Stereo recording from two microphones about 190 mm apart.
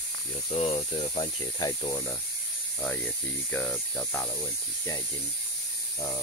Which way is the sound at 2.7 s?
5° left (ahead or behind).